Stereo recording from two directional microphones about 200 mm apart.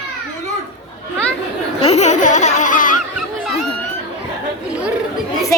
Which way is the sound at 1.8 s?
30° left (ahead or behind).